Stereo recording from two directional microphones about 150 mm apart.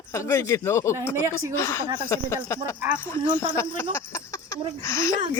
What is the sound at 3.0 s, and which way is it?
Speech, 15° left (ahead or behind).